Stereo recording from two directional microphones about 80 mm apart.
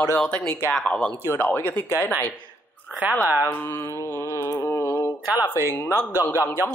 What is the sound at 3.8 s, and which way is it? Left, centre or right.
Mantra, left.